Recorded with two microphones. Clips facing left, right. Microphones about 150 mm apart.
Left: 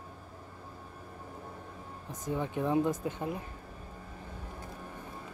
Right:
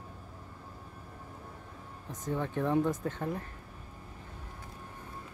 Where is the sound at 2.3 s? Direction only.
15° left (ahead or behind).